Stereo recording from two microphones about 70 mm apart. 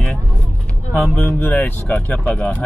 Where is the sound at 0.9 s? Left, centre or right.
Left.